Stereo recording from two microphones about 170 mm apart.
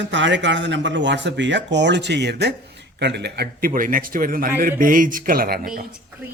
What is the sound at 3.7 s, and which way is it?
A man's voice, 55° right (ahead or behind).